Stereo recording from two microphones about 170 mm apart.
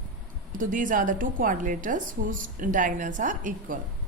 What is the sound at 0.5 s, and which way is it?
A woman's voice, 50° right (ahead or behind).